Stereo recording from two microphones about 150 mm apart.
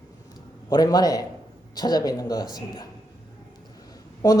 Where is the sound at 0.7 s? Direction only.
25° left (ahead or behind).